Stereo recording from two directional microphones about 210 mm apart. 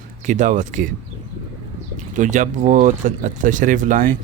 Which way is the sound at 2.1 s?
35° right (ahead or behind).